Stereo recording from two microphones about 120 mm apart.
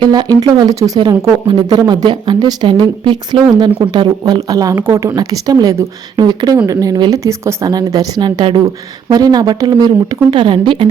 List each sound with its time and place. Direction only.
0.0 s a woman's voice: 35° right (ahead or behind)
4.7 s a woman's voice: 20° right (ahead or behind); by 10.8 s 45° right (ahead or behind)